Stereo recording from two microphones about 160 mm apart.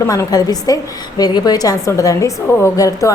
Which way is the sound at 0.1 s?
20° left (ahead or behind).